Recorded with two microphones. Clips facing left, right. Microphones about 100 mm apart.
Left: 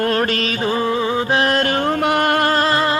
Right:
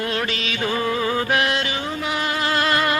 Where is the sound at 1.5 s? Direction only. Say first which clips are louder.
Left 7 dB; 50° left (ahead or behind).